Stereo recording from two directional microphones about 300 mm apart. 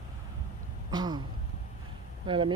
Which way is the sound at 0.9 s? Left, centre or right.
Centre.